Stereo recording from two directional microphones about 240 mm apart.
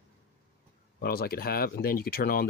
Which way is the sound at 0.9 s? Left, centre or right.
Left.